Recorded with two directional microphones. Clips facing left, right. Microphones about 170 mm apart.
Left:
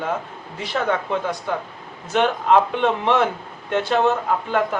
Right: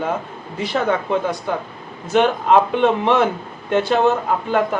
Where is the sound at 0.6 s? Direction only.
5° right (ahead or behind).